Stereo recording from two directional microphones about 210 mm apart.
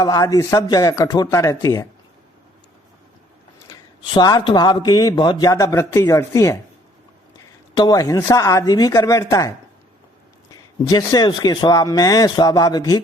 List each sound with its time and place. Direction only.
0.0 s speech: 15° left (ahead or behind)
3.7 s speech: 20° left (ahead or behind)
7.8 s speech: 15° left (ahead or behind)
10.9 s speech: 20° left (ahead or behind)